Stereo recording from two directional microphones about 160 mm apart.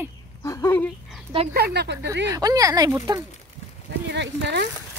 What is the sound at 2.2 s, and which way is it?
Speech, 20° right (ahead or behind).